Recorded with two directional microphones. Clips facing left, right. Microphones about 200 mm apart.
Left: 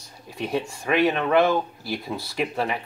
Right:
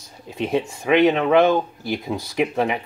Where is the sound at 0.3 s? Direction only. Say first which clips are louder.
Right 4 dB; 20° right (ahead or behind).